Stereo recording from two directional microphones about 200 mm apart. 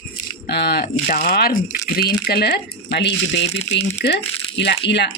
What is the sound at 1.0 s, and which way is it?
Speech, 45° left (ahead or behind).